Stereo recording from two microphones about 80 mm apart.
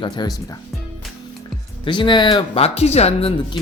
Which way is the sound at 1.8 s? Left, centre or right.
Left.